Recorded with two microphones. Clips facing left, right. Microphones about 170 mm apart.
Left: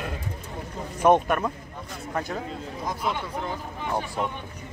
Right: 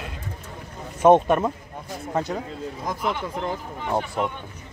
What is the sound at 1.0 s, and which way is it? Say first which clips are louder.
A man's voice: right 4 dB; 25° right (ahead or behind).